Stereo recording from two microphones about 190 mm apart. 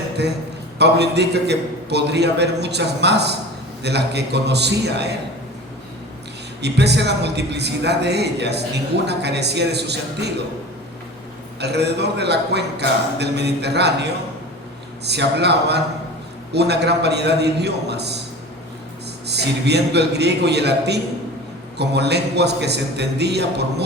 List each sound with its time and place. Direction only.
0.2 s a man's voice: 65° right (ahead or behind)
6.6 s a man's voice: 60° right (ahead or behind)
11.6 s a man's voice: 60° right (ahead or behind)
19.3 s a man's voice: 60° right (ahead or behind)